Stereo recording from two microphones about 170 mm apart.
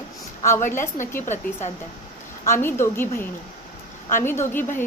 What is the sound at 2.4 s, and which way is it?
A woman's voice, 15° left (ahead or behind).